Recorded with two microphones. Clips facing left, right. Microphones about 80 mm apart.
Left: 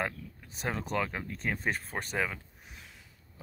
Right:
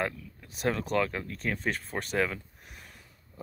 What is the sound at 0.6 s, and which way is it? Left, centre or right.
Speech, centre.